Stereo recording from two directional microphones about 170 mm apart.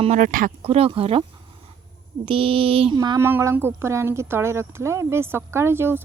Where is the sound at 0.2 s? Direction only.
50° right (ahead or behind).